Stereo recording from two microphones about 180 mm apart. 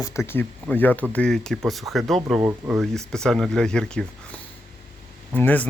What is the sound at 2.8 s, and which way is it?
Speech, 5° left (ahead or behind).